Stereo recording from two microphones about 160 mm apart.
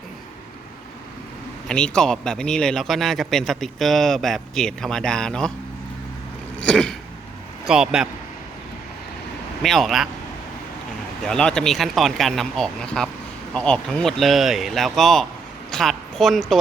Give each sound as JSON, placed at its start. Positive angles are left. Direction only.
{"t": 1.6, "sound": "speech", "side_deg": 5}
{"t": 6.6, "sound": "a man's voice", "side_deg": 5}
{"t": 9.6, "sound": "speech", "side_deg": 0}
{"t": 11.2, "sound": "speech", "side_deg": 5}